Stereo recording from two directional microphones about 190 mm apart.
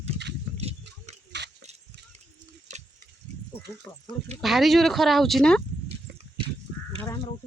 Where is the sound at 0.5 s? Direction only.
35° right (ahead or behind).